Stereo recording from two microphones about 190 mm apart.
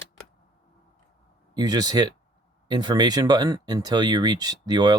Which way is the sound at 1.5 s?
20° right (ahead or behind).